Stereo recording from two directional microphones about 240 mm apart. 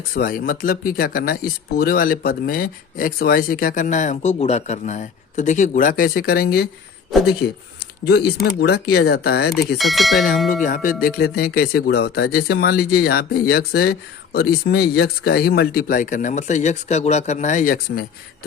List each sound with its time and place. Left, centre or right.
0.1 s speech: left
7.1 s speech: centre
8.6 s speech: left
9.7 s speech: centre
10.5 s speech: left